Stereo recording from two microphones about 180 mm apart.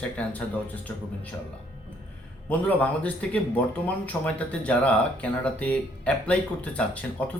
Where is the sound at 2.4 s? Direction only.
10° left (ahead or behind).